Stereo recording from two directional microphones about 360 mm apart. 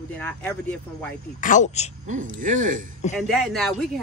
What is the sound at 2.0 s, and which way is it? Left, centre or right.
Speech, right.